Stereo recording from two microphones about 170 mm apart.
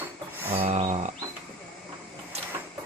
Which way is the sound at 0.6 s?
35° right (ahead or behind).